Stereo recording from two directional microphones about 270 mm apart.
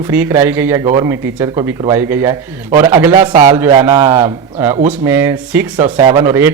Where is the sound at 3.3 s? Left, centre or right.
Right.